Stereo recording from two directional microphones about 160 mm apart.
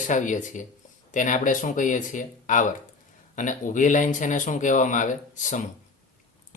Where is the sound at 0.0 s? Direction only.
50° left (ahead or behind).